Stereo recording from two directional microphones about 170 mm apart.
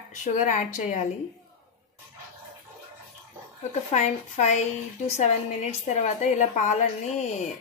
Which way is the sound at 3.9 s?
40° left (ahead or behind).